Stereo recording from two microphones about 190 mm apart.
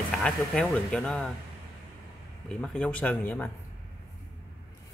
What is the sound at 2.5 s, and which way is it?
Speech, 5° left (ahead or behind).